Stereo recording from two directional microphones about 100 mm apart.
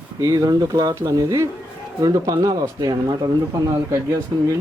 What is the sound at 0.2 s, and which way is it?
Speech, 40° right (ahead or behind).